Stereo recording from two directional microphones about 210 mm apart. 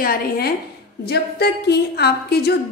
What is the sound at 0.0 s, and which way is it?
A woman's voice, 45° left (ahead or behind).